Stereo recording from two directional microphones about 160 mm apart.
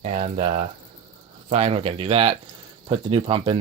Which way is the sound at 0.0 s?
45° right (ahead or behind).